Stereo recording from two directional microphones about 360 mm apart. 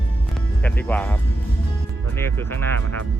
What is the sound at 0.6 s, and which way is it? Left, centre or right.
Speech, centre.